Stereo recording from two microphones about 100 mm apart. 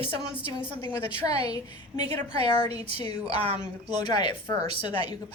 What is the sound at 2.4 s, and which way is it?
Speech, 50° left (ahead or behind).